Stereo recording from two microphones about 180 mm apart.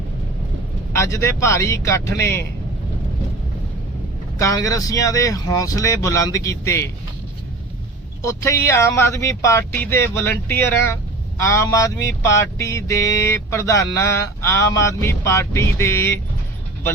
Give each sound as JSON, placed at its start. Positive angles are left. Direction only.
{"t": 0.9, "sound": "mantra", "side_deg": 15}
{"t": 4.4, "sound": "mantra", "side_deg": 20}
{"t": 8.2, "sound": "mantra", "side_deg": 15}